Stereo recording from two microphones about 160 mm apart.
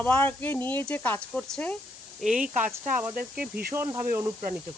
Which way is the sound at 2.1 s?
5° right (ahead or behind).